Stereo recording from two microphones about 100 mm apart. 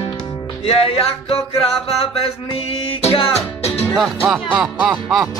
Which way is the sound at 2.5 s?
75° left (ahead or behind).